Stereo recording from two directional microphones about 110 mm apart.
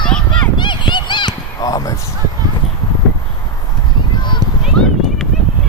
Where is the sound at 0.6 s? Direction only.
45° left (ahead or behind).